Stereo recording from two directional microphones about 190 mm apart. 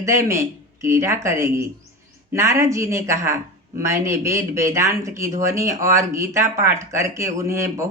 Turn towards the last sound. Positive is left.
turn(degrees=-15)  # may be behind; listen again after turning